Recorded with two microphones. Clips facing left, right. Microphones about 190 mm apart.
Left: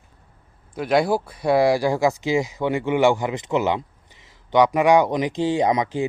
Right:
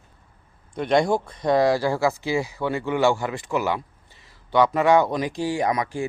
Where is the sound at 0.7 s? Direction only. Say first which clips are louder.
Left 1 dB; 5° left (ahead or behind).